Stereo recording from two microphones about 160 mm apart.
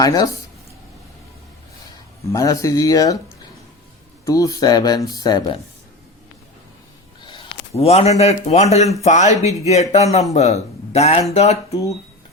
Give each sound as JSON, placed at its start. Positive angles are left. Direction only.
{"t": 0.0, "sound": "speech", "side_deg": 25}
{"t": 2.2, "sound": "speech", "side_deg": 20}
{"t": 4.3, "sound": "speech", "side_deg": 20}
{"t": 7.2, "sound": "a sound", "side_deg": 30}
{"t": 7.8, "sound": "speech", "side_deg": 40}